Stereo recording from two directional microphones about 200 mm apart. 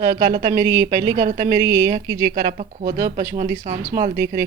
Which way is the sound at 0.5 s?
15° right (ahead or behind).